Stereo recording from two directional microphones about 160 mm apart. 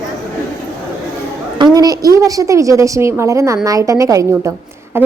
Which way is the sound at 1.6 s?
25° right (ahead or behind).